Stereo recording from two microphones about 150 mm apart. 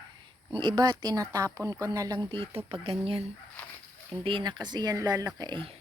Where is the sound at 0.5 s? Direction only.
30° right (ahead or behind).